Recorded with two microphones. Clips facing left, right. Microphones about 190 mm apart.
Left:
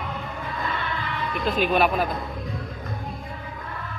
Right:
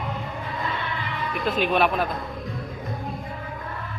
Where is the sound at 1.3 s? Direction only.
Centre (ahead or behind).